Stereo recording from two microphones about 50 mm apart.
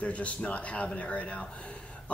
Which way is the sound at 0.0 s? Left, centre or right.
Left.